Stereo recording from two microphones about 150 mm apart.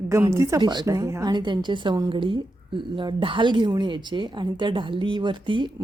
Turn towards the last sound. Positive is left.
turn(degrees=-30)  # may be behind; listen again after turning